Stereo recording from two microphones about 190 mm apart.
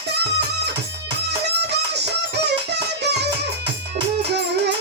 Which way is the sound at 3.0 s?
60° right (ahead or behind).